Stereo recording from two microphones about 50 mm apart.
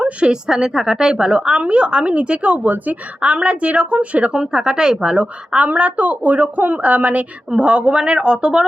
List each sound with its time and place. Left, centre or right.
0.0 s a woman's voice: centre